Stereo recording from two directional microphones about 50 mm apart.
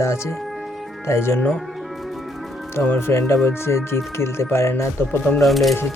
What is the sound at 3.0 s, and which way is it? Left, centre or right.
Speech, left.